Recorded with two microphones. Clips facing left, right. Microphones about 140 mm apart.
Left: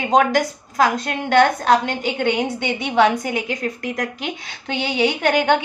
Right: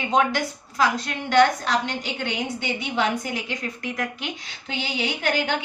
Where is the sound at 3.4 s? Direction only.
50° left (ahead or behind).